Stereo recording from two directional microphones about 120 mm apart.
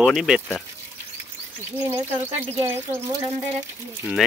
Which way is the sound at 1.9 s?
20° right (ahead or behind).